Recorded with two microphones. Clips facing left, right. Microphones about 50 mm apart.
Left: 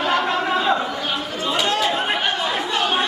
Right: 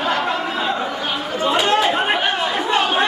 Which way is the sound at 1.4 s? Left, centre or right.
Right.